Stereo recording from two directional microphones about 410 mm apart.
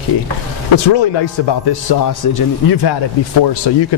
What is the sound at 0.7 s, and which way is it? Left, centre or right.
Speech, left.